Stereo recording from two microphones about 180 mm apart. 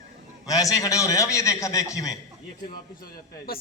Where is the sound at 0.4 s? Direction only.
20° left (ahead or behind).